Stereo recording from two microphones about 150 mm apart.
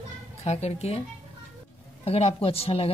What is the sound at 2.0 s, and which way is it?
Speech, 40° left (ahead or behind).